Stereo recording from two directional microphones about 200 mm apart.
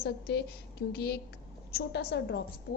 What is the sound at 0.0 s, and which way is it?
A woman's voice, 55° left (ahead or behind).